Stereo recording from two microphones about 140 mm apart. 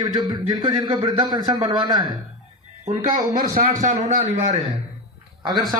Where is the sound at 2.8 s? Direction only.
55° right (ahead or behind).